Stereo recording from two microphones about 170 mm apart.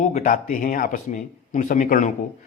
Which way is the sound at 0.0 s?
45° left (ahead or behind).